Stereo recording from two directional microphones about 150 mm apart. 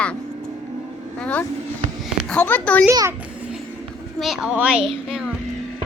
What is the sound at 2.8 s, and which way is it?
Speech, 20° right (ahead or behind).